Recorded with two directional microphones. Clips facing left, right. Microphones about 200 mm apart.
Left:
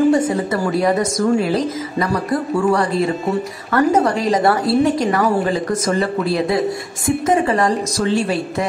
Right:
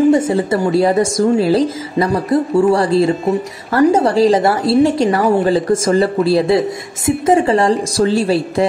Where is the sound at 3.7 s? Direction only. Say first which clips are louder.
Right 3 dB; 30° right (ahead or behind).